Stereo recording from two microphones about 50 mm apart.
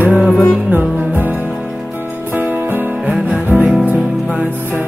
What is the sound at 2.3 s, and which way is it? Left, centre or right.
Music, right.